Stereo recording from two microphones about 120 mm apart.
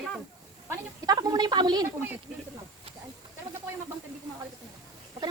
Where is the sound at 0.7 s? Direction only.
30° right (ahead or behind).